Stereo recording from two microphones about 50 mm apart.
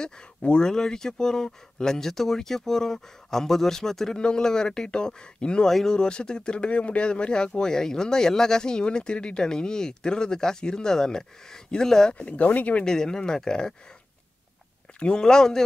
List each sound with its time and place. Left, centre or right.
0.4 s speech: centre
5.7 s speech: centre
5.9 s speech: centre
12.1 s speech: left
12.8 s speech: centre
15.0 s speech: centre